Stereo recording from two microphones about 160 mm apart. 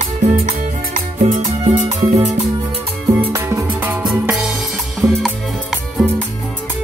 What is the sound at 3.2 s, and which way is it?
Music, 15° right (ahead or behind).